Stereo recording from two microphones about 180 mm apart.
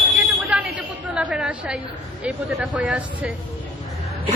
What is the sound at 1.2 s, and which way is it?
Speech, 5° right (ahead or behind).